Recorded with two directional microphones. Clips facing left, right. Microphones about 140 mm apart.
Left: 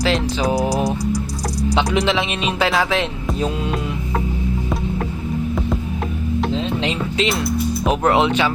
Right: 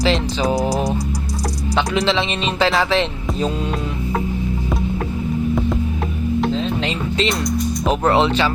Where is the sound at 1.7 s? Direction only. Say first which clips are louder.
Right 1 dB; 15° left (ahead or behind).